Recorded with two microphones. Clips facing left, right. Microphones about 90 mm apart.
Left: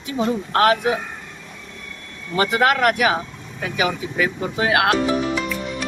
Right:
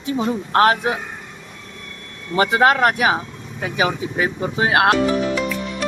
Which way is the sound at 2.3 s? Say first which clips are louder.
Right 2 dB; 25° right (ahead or behind).